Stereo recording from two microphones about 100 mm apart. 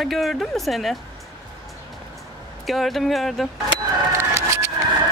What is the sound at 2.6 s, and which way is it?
Speech, centre (ahead or behind).